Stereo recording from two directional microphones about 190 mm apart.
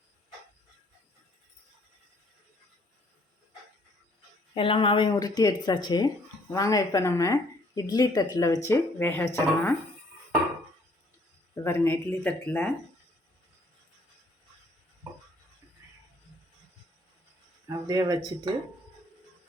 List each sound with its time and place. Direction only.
4.5 s speech: 25° left (ahead or behind)
11.5 s speech: 15° left (ahead or behind)
17.7 s speech: 20° right (ahead or behind)